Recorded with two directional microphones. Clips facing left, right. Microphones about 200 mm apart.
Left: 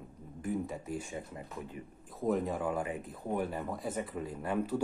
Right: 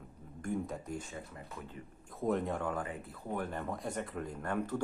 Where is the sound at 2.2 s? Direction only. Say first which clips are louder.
Left 2 dB; centre (ahead or behind).